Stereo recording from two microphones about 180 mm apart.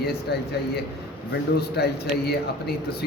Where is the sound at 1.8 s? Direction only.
65° left (ahead or behind).